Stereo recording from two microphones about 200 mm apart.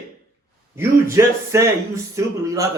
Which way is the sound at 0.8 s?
15° right (ahead or behind).